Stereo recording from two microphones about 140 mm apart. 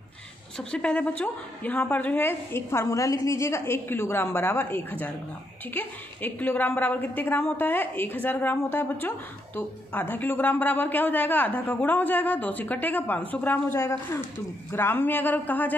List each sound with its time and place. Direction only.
0.6 s a man's voice: 5° left (ahead or behind)